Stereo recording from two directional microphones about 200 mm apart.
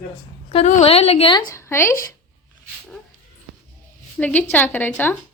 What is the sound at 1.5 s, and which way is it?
Speech, 15° left (ahead or behind).